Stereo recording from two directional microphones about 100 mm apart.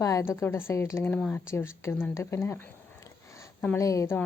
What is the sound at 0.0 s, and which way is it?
Speech, 30° left (ahead or behind).